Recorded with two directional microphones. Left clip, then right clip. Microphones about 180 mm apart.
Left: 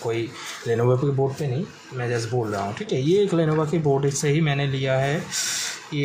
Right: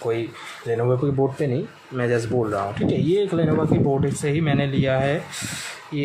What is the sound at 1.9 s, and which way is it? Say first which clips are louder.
Speech: right 5 dB; 20° right (ahead or behind).